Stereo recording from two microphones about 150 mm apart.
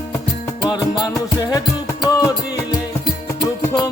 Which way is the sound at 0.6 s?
30° left (ahead or behind).